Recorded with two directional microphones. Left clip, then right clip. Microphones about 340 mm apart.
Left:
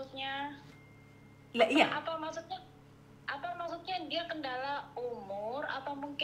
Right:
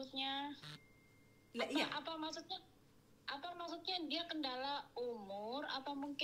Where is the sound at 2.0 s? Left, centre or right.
Right.